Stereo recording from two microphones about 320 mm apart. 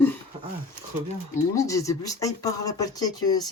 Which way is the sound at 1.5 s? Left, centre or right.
Centre.